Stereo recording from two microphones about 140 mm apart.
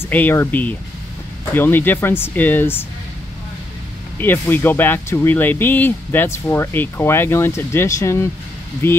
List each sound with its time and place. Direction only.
0.0 s speech: 15° left (ahead or behind)
4.2 s speech: 15° left (ahead or behind)